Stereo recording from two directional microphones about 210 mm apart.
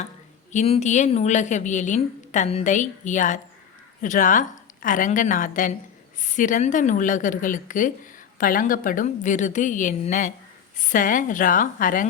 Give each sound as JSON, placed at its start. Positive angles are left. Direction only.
{"t": 0.5, "sound": "a woman's voice", "side_deg": 30}